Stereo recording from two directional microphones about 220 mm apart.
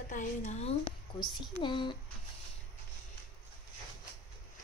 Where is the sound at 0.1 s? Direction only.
35° left (ahead or behind).